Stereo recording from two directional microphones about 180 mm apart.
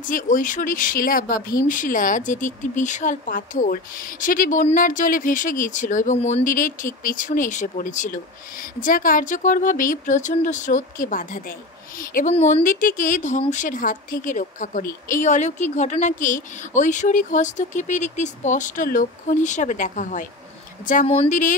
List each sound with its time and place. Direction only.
0.0 s speech: 45° left (ahead or behind)
12.4 s speech: 40° left (ahead or behind)